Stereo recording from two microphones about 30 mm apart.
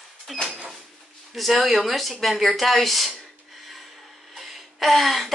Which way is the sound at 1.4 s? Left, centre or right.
Centre.